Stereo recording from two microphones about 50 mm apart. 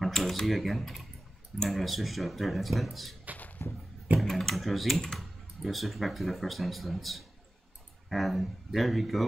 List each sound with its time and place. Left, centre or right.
0.0 s speech: centre
3.3 s a sound: left
4.2 s speech: centre